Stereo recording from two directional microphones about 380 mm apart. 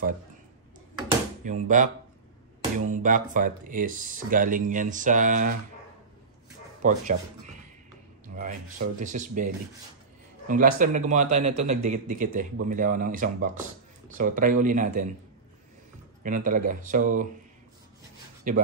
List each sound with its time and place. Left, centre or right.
0.9 s drawer open or close: centre
2.9 s speech: right
6.8 s speech: centre
10.8 s speech: centre
16.2 s speech: right
18.5 s speech: right